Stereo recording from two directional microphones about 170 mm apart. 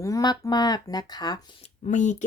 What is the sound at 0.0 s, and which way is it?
Speech, 20° left (ahead or behind).